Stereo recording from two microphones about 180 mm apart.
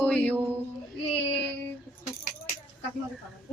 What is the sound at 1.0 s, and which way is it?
Child singing, 30° left (ahead or behind).